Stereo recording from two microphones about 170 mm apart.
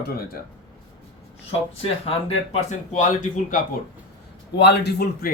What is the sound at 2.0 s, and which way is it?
Speech, 40° left (ahead or behind).